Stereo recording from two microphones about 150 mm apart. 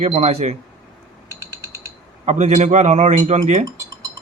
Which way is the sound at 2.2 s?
50° right (ahead or behind).